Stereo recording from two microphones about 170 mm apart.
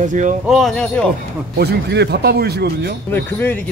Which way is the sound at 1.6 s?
75° right (ahead or behind).